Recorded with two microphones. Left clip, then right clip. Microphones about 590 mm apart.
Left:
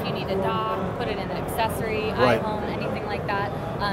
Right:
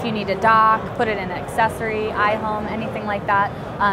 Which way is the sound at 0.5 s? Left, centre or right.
Right.